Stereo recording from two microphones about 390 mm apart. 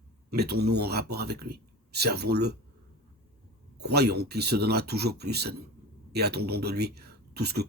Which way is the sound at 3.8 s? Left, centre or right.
Right.